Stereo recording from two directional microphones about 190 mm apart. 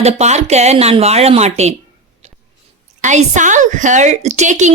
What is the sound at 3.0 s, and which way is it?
A woman's voice, 40° right (ahead or behind).